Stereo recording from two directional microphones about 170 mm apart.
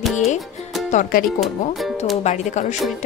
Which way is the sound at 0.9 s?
55° left (ahead or behind).